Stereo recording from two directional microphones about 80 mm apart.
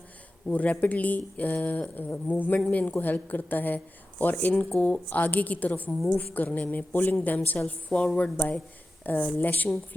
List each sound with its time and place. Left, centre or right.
0.4 s a woman's voice: centre